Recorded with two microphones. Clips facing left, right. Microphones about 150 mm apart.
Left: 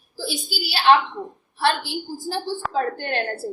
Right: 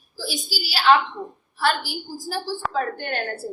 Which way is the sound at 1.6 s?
25° left (ahead or behind).